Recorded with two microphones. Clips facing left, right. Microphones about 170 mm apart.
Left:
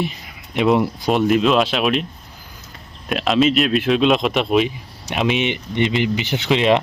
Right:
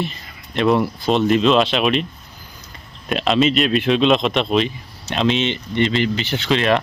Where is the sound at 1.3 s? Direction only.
5° left (ahead or behind).